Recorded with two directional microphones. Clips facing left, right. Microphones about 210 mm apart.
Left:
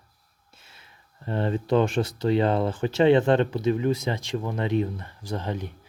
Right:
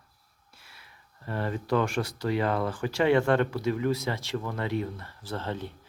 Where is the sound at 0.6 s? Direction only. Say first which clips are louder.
Left 1 dB; 25° left (ahead or behind).